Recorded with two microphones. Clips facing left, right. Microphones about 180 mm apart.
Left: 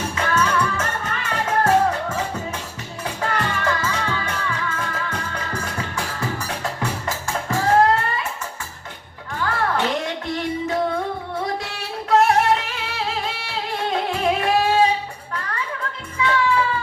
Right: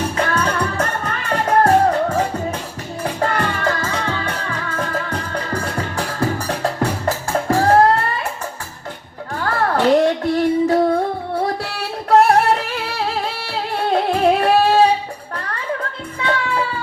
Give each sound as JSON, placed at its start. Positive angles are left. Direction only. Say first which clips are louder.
{"t": 0.2, "sound": "music", "louder": "left 1 dB", "side_deg": -35}
{"t": 9.3, "sound": "child singing", "louder": "right 3 dB", "side_deg": -40}